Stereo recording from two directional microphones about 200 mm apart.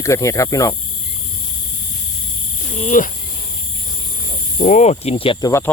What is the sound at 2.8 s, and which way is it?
Speech, 40° left (ahead or behind).